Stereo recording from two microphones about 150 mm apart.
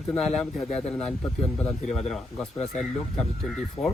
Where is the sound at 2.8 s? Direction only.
Centre (ahead or behind).